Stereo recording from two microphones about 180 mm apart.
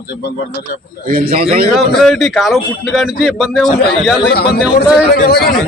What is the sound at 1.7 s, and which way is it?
Speech, centre (ahead or behind).